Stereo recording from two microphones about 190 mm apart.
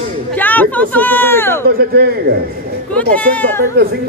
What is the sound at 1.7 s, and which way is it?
Speech, 55° right (ahead or behind).